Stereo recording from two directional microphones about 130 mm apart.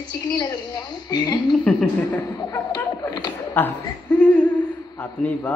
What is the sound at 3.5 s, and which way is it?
A woman's voice, 15° left (ahead or behind).